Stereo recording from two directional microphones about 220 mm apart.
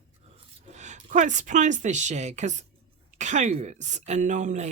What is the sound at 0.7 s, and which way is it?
A woman's voice, 30° right (ahead or behind).